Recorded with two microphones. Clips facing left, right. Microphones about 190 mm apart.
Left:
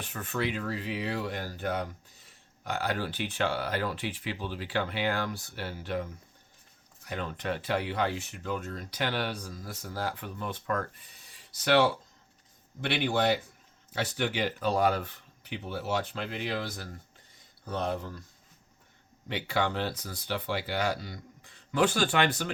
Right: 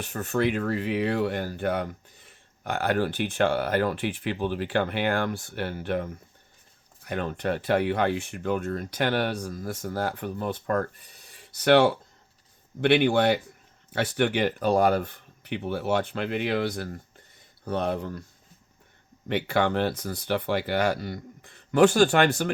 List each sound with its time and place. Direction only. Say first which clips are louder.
0.0 s speech: right 7 dB; 45° right (ahead or behind)
11.6 s speech: right 5 dB; 55° right (ahead or behind)
19.3 s speech: right 6 dB; 55° right (ahead or behind)